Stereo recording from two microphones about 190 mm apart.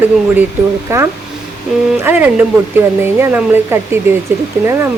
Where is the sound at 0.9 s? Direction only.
15° right (ahead or behind).